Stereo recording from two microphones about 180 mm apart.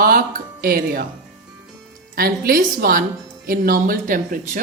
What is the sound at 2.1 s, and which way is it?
A woman's voice, 55° right (ahead or behind).